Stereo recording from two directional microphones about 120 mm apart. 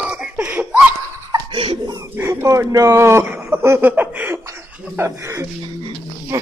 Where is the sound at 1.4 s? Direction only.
45° right (ahead or behind).